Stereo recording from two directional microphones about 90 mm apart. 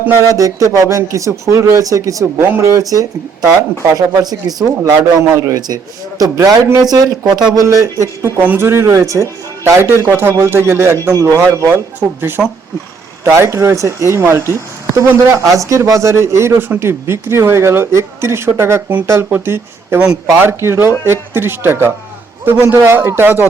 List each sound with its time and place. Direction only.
0.3 s speech: 40° right (ahead or behind)
4.8 s speech: 30° right (ahead or behind)
5.5 s speech: 45° right (ahead or behind)
6.8 s speech: 45° right (ahead or behind)
8.4 s speech: 20° right (ahead or behind)